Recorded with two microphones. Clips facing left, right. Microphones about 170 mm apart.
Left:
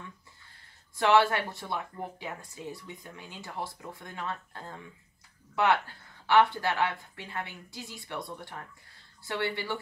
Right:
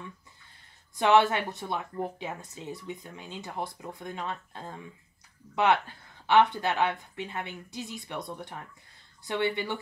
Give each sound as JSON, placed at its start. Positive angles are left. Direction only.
{"t": 0.9, "sound": "speech", "side_deg": -20}